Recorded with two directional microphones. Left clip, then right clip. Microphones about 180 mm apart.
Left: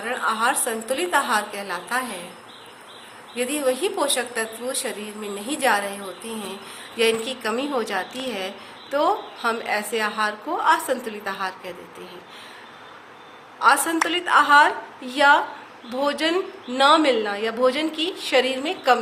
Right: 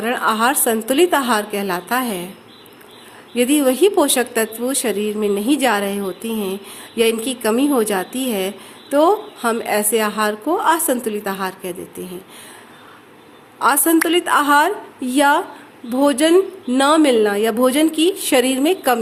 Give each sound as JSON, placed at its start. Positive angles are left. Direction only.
{"t": 0.0, "sound": "a woman's voice", "side_deg": -50}
{"t": 3.3, "sound": "a woman's voice", "side_deg": -55}
{"t": 13.6, "sound": "speech", "side_deg": -55}